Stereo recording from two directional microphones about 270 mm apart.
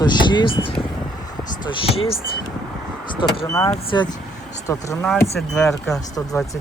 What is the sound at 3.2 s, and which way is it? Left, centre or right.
Speech, centre.